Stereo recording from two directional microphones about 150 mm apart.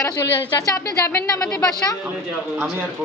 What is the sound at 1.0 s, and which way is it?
Speech, 15° left (ahead or behind).